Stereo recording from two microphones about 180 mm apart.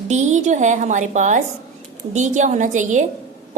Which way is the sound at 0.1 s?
40° right (ahead or behind).